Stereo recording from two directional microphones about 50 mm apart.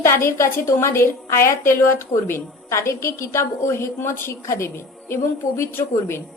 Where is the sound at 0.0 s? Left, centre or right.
Left.